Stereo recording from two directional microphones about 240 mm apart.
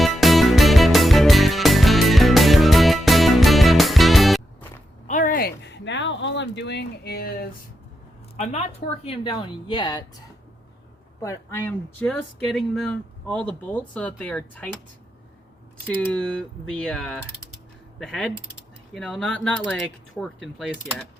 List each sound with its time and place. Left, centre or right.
0.0 s music: centre
5.0 s a sound: left
8.4 s a woman's voice: left
11.2 s speech: centre
16.0 s speech: centre